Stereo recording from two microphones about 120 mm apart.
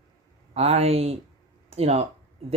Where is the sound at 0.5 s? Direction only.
60° right (ahead or behind).